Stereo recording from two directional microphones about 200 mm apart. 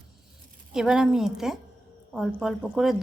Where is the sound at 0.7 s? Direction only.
5° right (ahead or behind).